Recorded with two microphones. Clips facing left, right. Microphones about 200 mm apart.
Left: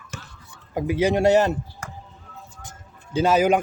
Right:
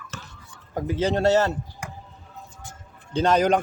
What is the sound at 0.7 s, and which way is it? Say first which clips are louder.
Speech: left 3 dB; 10° left (ahead or behind).